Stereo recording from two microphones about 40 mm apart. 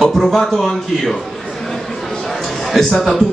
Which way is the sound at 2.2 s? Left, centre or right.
Centre.